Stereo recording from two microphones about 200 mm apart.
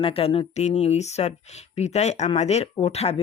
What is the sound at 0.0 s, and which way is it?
Speech, 30° left (ahead or behind).